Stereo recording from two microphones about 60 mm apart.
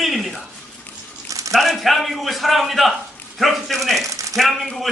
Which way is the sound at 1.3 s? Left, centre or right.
Right.